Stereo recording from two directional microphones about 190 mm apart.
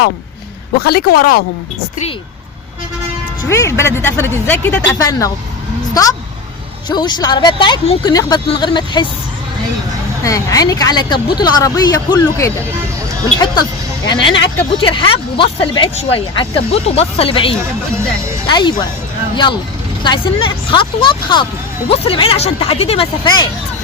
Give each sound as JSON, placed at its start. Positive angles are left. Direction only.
{"t": 0.8, "sound": "speech", "side_deg": 55}
{"t": 3.5, "sound": "speech", "side_deg": 15}
{"t": 10.2, "sound": "speech", "side_deg": 15}
{"t": 14.0, "sound": "speech", "side_deg": 25}
{"t": 17.6, "sound": "speech", "side_deg": -15}
{"t": 18.4, "sound": "speech", "side_deg": 25}
{"t": 20.1, "sound": "speech", "side_deg": 25}